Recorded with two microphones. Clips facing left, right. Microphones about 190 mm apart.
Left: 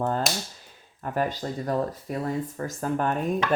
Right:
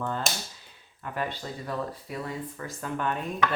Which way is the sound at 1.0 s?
40° left (ahead or behind).